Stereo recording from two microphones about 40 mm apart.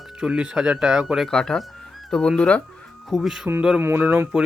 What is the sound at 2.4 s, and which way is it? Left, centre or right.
Speech, left.